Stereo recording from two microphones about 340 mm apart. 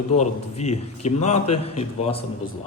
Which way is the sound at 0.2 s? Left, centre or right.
Centre.